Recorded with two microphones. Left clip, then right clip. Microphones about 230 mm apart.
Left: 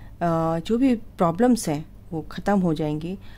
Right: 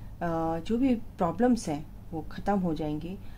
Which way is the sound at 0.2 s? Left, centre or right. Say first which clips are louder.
Left 7 dB; left.